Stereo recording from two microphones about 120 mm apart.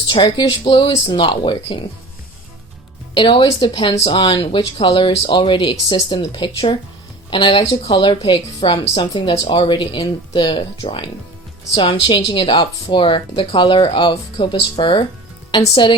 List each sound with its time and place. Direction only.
0.0 s speech: 40° left (ahead or behind)
3.2 s a woman's voice: 45° left (ahead or behind)